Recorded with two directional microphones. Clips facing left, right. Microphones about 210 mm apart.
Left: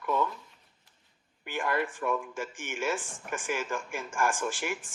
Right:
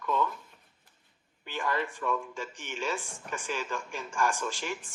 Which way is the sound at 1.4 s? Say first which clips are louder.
Left 2 dB; 15° left (ahead or behind).